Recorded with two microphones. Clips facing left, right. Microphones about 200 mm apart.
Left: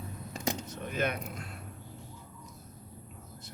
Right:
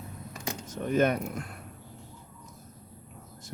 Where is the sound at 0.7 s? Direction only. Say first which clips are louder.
Right 12 dB; 45° right (ahead or behind).